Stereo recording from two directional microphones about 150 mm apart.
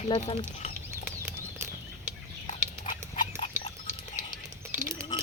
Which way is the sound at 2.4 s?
55° left (ahead or behind).